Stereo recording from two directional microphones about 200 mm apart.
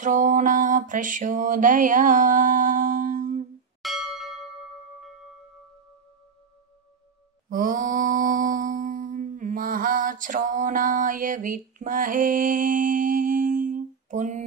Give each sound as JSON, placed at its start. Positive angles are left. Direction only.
{"t": 0.0, "sound": "mantra", "side_deg": -40}
{"t": 3.8, "sound": "bell", "side_deg": 0}
{"t": 7.4, "sound": "mantra", "side_deg": -45}